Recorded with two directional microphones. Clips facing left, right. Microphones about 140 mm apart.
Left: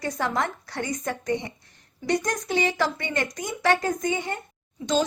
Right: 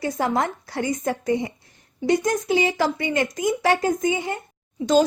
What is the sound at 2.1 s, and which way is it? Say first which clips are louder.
Speech: right 5 dB; 5° right (ahead or behind).